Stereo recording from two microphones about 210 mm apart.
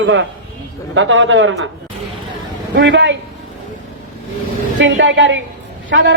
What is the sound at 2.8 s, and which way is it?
Speech, 60° right (ahead or behind).